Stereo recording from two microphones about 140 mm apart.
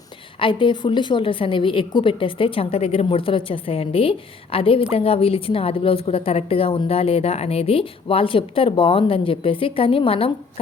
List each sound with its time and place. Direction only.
0.3 s a woman's voice: 35° left (ahead or behind)